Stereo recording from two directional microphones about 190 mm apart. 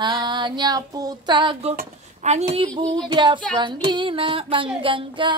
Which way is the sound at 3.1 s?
25° right (ahead or behind).